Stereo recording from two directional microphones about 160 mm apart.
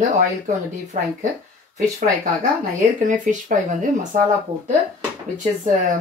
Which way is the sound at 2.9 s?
50° right (ahead or behind).